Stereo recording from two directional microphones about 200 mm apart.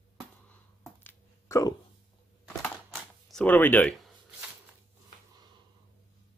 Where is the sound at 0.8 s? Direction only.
10° left (ahead or behind).